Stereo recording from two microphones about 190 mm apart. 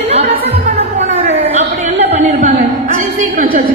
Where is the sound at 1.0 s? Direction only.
35° right (ahead or behind).